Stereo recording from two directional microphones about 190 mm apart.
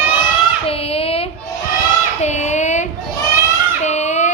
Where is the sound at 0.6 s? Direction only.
30° left (ahead or behind).